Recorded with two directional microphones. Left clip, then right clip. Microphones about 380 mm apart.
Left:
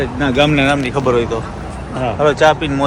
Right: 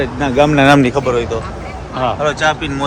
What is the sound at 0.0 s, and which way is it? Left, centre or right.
Speech, centre.